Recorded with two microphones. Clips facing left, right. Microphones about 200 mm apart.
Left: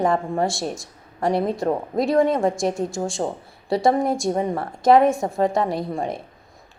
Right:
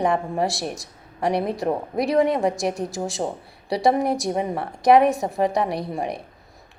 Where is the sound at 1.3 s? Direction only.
20° left (ahead or behind).